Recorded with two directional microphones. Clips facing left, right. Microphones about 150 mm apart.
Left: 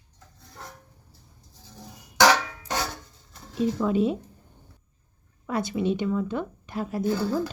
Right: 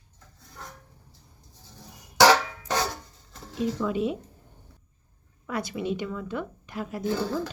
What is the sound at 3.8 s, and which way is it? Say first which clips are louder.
Speech: left 5 dB; 35° left (ahead or behind).